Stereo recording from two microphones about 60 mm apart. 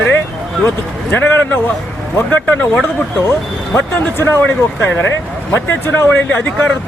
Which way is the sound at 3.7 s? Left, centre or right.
Left.